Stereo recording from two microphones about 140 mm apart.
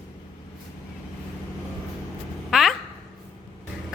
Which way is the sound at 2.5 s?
Centre (ahead or behind).